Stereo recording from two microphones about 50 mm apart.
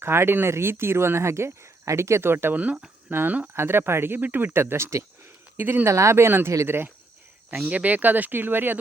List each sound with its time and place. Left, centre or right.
0.0 s speech: right
2.2 s speech: right
4.5 s speech: right
5.5 s speech: right
5.8 s speech: right
7.7 s speech: right